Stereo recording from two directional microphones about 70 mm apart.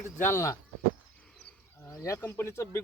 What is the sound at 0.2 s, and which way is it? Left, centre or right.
Speech, left.